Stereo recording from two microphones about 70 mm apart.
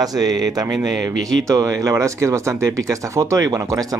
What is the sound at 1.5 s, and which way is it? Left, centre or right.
Speech, right.